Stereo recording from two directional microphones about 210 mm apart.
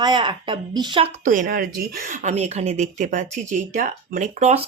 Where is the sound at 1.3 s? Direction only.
40° right (ahead or behind).